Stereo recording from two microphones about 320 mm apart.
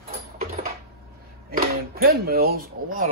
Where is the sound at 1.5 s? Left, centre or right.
Right.